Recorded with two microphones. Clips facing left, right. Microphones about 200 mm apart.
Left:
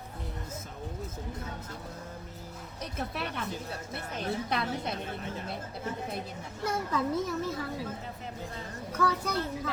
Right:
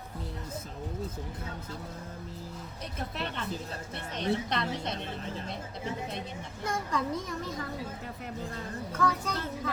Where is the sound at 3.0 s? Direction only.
10° left (ahead or behind).